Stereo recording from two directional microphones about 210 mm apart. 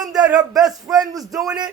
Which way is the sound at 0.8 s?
15° right (ahead or behind).